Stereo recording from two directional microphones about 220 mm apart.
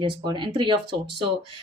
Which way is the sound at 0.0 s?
20° right (ahead or behind).